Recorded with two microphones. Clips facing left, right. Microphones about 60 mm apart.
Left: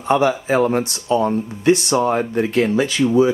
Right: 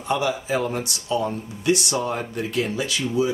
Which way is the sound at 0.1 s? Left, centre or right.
Left.